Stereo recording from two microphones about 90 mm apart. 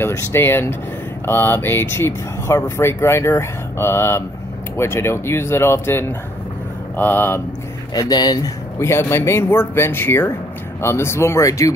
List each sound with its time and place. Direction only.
0.0 s speech: 25° left (ahead or behind)
7.9 s speech: 45° left (ahead or behind)
8.7 s speech: 30° left (ahead or behind)